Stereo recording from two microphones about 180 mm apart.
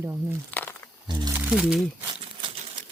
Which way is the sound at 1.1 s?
25° right (ahead or behind).